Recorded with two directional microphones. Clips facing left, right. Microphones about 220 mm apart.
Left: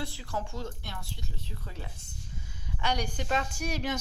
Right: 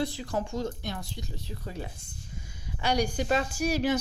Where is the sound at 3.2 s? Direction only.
35° right (ahead or behind).